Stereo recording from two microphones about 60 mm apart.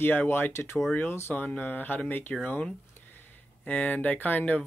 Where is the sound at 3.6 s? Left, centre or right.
Left.